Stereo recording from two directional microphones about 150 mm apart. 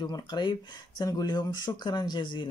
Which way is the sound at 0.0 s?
30° left (ahead or behind).